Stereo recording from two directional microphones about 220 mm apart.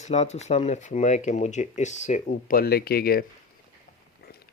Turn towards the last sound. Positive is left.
turn(degrees=45)  # may be behind; listen again after turning